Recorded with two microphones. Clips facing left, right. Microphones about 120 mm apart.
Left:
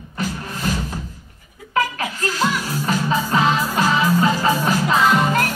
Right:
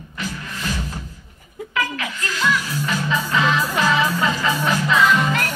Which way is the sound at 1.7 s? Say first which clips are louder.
Left 4 dB; 40° left (ahead or behind).